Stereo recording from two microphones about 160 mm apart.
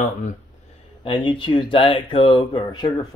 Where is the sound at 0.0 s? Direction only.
50° left (ahead or behind).